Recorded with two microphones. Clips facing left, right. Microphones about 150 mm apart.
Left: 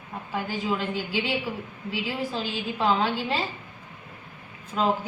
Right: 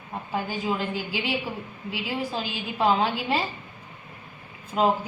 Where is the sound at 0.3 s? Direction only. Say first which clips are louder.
Even; 20° right (ahead or behind).